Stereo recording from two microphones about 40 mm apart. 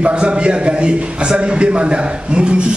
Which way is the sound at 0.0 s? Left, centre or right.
Right.